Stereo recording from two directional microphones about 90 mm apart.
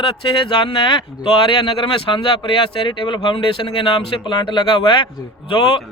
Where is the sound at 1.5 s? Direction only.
70° left (ahead or behind).